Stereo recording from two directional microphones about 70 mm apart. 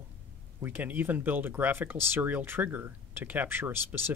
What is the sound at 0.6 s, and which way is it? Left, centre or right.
Speech, right.